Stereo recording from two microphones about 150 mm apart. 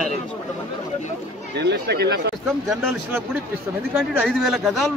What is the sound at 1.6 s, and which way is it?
Speech, 90° right.